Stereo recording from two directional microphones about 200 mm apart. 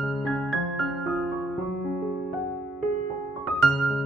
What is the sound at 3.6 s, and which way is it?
Music, 5° left (ahead or behind).